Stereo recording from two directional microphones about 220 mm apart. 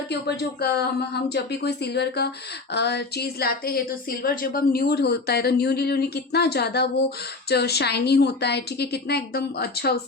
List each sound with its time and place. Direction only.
0.1 s a woman's voice: 50° left (ahead or behind)